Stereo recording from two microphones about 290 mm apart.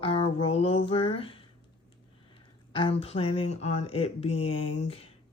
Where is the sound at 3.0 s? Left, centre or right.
Centre.